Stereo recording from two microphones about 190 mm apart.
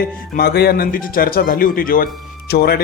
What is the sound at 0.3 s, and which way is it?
A man's voice, 55° left (ahead or behind).